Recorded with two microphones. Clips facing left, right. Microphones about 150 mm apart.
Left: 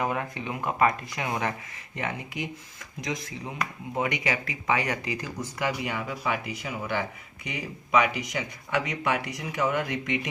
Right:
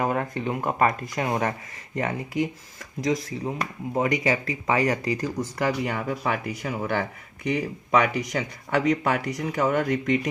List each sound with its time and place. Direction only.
0.0 s speech: 45° right (ahead or behind)